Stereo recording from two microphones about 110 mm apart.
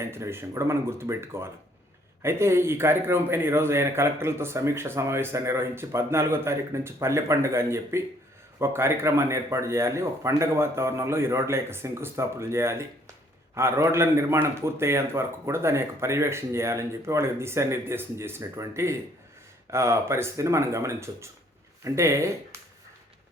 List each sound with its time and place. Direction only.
0.0 s a man's voice: 25° right (ahead or behind)